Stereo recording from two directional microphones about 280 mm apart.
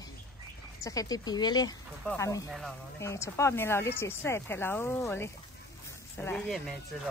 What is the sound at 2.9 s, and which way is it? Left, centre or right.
Speech, centre.